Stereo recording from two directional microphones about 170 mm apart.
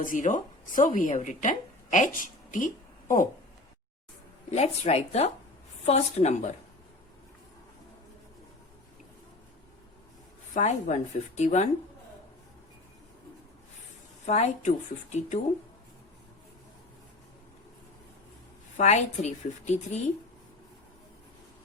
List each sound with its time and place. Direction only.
0.0 s speech: 50° left (ahead or behind)
4.5 s a woman's voice: 40° left (ahead or behind)
10.5 s speech: 45° left (ahead or behind)
14.3 s speech: 40° left (ahead or behind)
18.8 s a woman's voice: 40° left (ahead or behind)